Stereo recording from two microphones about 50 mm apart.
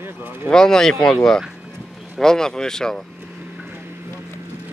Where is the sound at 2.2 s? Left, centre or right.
Centre.